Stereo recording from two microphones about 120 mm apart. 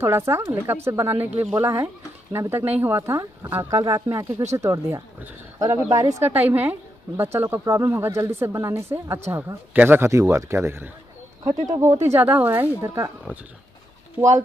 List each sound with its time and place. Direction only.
0.0 s speech: 20° right (ahead or behind)
6.2 s speech: 15° right (ahead or behind)